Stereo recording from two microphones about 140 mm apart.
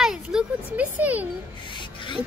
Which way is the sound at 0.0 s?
5° right (ahead or behind).